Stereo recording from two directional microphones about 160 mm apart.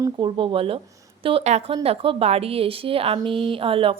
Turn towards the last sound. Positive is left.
turn(degrees=-35)  # may be behind; listen again after turning